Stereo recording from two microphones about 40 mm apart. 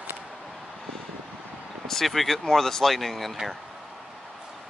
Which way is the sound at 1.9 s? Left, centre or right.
Centre.